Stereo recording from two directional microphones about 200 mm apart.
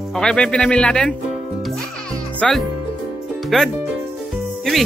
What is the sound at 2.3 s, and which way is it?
A child's voice, 5° left (ahead or behind).